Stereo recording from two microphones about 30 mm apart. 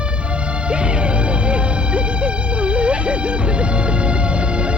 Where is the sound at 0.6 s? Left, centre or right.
Right.